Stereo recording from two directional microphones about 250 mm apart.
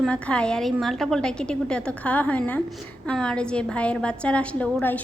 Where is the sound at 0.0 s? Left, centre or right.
Centre.